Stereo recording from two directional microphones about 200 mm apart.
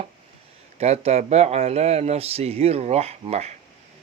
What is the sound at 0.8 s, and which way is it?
Speech, 30° right (ahead or behind).